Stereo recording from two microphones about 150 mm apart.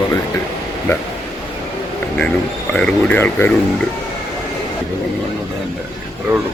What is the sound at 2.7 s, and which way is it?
Speech, 5° left (ahead or behind).